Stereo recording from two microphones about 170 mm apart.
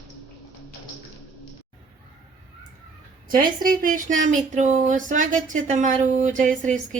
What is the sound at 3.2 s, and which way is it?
Speech, 55° right (ahead or behind).